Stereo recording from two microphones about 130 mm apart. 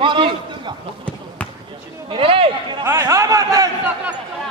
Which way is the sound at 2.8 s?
20° right (ahead or behind).